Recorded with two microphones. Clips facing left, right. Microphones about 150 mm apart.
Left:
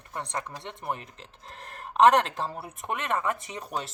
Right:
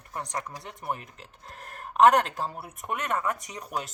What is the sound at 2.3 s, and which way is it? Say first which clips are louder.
Speech: left 1 dB; 30° left (ahead or behind).